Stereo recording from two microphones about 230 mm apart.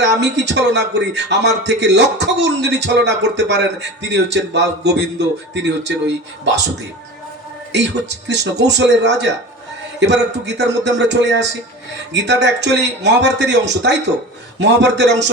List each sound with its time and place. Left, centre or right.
0.0 s a man's voice: right
7.7 s a man's voice: right